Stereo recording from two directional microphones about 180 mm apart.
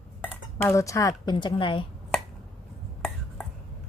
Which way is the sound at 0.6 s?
15° left (ahead or behind).